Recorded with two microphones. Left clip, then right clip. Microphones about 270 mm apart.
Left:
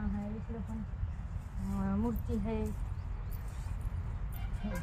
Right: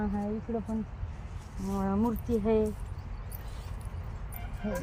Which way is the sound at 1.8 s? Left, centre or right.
Right.